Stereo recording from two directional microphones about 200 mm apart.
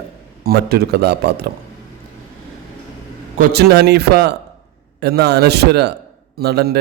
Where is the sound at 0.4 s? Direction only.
50° right (ahead or behind).